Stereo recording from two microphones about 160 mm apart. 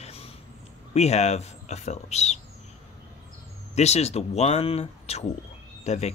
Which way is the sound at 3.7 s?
45° left (ahead or behind).